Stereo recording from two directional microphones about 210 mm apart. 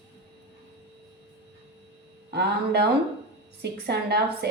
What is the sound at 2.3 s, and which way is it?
A woman's voice, 50° right (ahead or behind).